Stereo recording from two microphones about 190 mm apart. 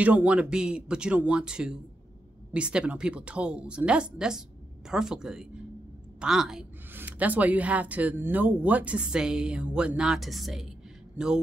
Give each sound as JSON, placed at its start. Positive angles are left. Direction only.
{"t": 0.0, "sound": "a woman's voice", "side_deg": -5}